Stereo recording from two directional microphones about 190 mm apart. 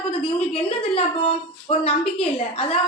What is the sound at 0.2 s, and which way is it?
A woman's voice, 30° left (ahead or behind).